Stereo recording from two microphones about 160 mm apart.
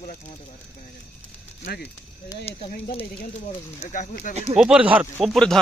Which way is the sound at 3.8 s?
50° left (ahead or behind).